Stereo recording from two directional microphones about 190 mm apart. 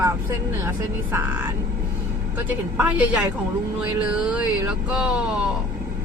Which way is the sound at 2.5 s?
10° right (ahead or behind).